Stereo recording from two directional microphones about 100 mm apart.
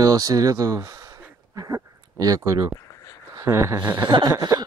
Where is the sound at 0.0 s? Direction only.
40° right (ahead or behind).